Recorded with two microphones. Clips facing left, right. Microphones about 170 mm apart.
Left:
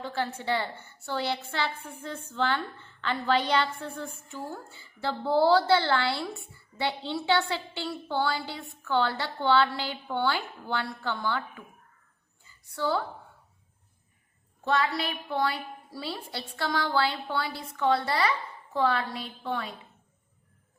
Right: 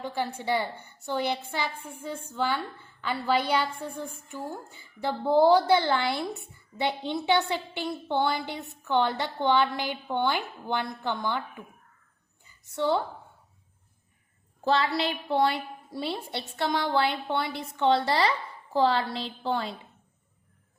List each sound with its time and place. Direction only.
0.0 s a woman's voice: 15° right (ahead or behind)
14.6 s a woman's voice: 30° right (ahead or behind)